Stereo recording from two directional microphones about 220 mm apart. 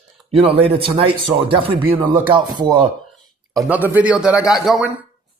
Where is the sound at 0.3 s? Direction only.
25° right (ahead or behind).